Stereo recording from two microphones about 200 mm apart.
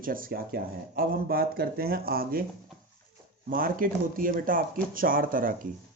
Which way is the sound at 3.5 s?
45° right (ahead or behind).